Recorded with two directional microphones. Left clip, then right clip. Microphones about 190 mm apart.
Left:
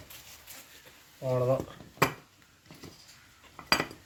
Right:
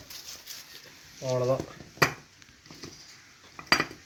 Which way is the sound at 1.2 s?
5° right (ahead or behind).